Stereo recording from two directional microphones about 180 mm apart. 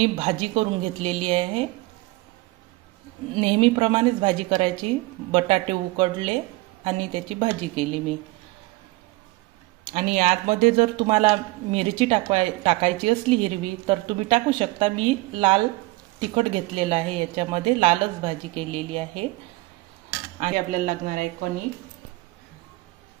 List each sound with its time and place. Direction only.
0.0 s speech: 30° right (ahead or behind)
3.3 s a woman's voice: 30° right (ahead or behind)
9.9 s speech: 40° right (ahead or behind)
20.3 s speech: 40° right (ahead or behind)